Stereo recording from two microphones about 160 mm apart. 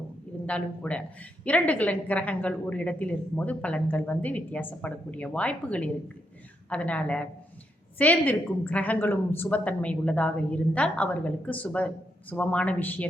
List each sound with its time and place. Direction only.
0.4 s a woman's voice: 10° left (ahead or behind)